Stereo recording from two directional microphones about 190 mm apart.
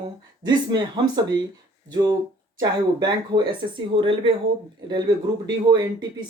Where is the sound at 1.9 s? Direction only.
20° right (ahead or behind).